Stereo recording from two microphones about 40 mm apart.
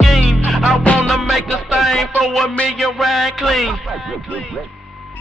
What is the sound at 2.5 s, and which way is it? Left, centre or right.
Music, left.